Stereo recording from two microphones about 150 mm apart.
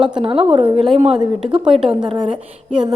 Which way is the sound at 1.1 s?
5° right (ahead or behind).